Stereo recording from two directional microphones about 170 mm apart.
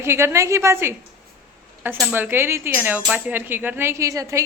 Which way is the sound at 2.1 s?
10° right (ahead or behind).